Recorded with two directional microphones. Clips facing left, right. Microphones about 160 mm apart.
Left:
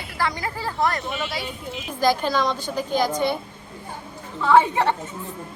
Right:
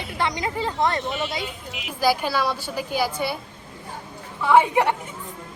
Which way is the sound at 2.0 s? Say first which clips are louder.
Left 1 dB; 10° right (ahead or behind).